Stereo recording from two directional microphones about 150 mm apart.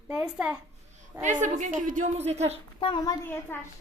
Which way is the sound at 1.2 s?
55° right (ahead or behind).